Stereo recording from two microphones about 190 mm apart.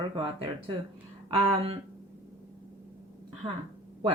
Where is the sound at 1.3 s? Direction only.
30° right (ahead or behind).